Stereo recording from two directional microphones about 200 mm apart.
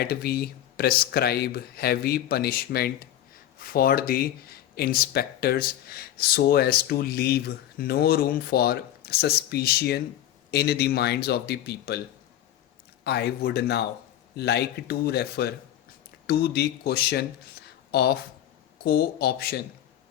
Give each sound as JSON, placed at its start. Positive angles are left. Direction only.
{"t": 0.0, "sound": "speech", "side_deg": 50}
{"t": 13.1, "sound": "speech", "side_deg": 55}